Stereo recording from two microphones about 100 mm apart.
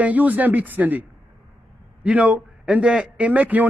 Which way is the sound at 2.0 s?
15° right (ahead or behind).